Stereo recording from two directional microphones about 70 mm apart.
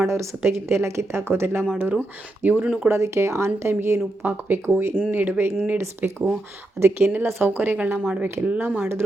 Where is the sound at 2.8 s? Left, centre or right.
Right; by 8.3 s centre.